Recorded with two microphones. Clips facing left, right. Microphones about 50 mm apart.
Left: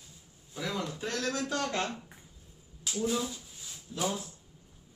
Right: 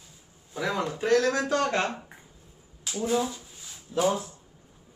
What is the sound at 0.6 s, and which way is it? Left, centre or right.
Speech, right.